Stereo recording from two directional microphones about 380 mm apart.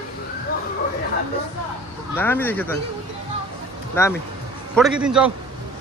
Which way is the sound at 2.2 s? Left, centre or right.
Centre.